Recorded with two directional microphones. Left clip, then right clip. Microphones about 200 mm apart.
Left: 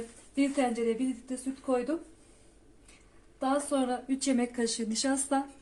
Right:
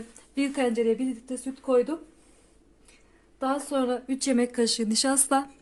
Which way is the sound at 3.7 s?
55° right (ahead or behind).